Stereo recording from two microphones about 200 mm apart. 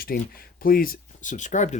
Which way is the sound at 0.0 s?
45° left (ahead or behind).